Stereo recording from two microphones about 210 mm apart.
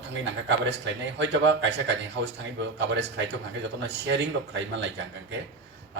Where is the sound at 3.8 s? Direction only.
55° right (ahead or behind).